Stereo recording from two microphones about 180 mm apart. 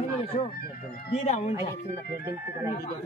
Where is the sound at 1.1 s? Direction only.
40° left (ahead or behind).